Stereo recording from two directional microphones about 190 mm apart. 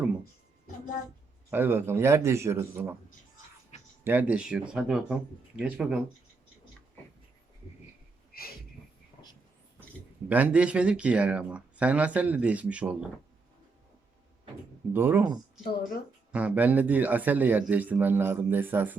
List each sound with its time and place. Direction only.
1.5 s speech: 10° right (ahead or behind)
4.0 s speech: 10° right (ahead or behind)
8.3 s a sound: 50° left (ahead or behind)
10.2 s speech: 10° right (ahead or behind)
14.9 s speech: 10° right (ahead or behind)
16.3 s speech: 5° right (ahead or behind)